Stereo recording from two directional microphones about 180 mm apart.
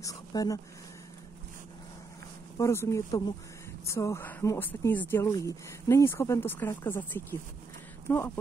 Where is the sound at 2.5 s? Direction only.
15° left (ahead or behind).